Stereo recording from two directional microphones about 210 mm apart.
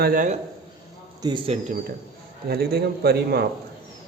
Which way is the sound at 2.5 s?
50° right (ahead or behind).